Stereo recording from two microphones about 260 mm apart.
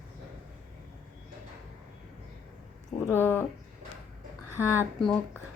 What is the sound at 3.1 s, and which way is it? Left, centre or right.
Speech, centre.